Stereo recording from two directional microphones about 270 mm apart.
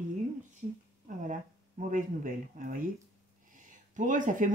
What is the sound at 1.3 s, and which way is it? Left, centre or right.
Speech, right.